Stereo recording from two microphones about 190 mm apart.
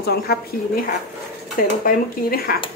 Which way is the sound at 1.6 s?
50° left (ahead or behind).